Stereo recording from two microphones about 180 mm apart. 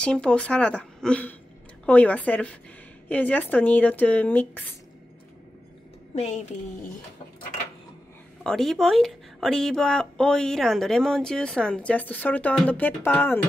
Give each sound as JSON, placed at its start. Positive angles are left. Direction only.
{"t": 0.0, "sound": "speech", "side_deg": 5}
{"t": 6.1, "sound": "a woman's voice", "side_deg": 40}
{"t": 8.5, "sound": "speech", "side_deg": 0}